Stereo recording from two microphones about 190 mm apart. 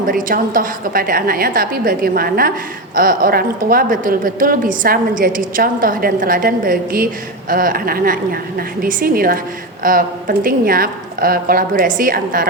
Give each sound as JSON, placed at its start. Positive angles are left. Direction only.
{"t": 0.0, "sound": "speech", "side_deg": -45}